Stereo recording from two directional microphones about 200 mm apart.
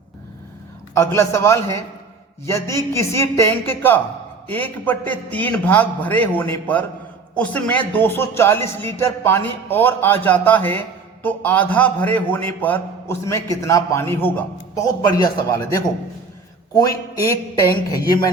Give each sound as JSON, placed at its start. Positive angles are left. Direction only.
{"t": 0.9, "sound": "speech", "side_deg": 15}
{"t": 15.0, "sound": "a man's voice", "side_deg": 20}
{"t": 17.7, "sound": "speech", "side_deg": 15}